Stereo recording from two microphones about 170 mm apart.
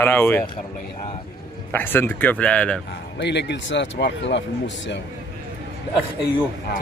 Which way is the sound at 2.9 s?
90° left.